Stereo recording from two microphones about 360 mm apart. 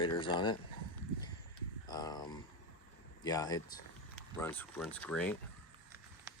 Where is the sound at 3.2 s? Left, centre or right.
Centre.